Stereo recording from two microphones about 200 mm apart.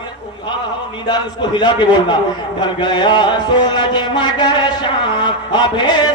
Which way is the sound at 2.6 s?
25° left (ahead or behind).